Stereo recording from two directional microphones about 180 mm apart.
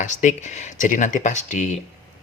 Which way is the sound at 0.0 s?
45° left (ahead or behind).